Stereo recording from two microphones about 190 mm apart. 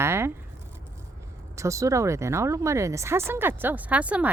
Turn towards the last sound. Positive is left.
turn(degrees=-5)  # may be behind; listen again after turning